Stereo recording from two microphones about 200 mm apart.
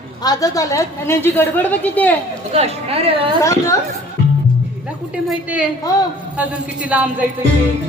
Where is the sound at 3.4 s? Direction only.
15° left (ahead or behind).